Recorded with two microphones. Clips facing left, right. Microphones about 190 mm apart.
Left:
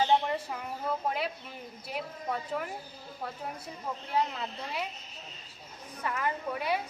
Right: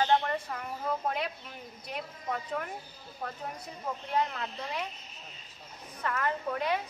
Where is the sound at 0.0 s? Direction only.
10° left (ahead or behind).